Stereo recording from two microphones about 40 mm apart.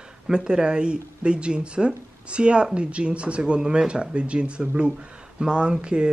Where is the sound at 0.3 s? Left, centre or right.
Centre.